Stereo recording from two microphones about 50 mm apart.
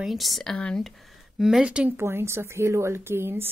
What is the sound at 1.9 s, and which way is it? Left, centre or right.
A woman's voice, right.